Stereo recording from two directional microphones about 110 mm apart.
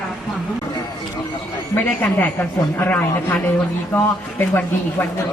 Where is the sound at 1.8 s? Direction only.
15° left (ahead or behind).